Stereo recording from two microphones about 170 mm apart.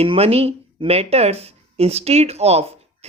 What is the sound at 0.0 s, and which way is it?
Speech, 35° right (ahead or behind).